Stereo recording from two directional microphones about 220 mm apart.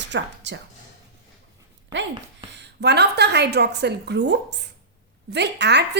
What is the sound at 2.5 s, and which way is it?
A woman's voice, 50° right (ahead or behind).